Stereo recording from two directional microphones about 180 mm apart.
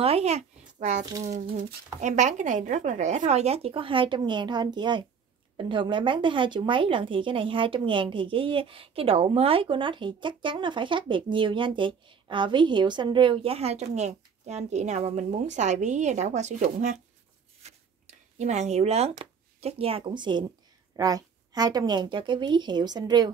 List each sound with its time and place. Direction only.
0.0 s a child's voice: 35° right (ahead or behind)
17.6 s a sound: 35° right (ahead or behind)
18.4 s a woman's voice: 40° right (ahead or behind); by 23.3 s 20° right (ahead or behind)